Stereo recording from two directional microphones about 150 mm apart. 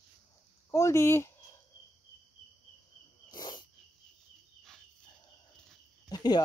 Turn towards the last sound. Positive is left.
turn(degrees=25)  # may be behind; listen again after turning